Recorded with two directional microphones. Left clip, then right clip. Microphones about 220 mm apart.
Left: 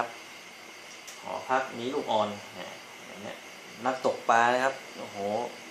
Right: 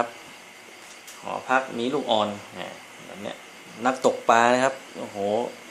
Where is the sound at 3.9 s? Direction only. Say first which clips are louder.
Right 6 dB; 50° right (ahead or behind).